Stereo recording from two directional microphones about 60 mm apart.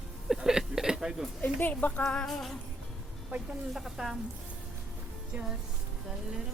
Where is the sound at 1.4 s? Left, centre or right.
Left.